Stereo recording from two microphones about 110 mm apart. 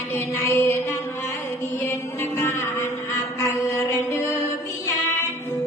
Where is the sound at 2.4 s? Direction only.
25° left (ahead or behind).